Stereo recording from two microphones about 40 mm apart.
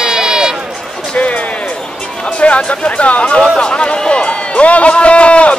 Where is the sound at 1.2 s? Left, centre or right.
Left.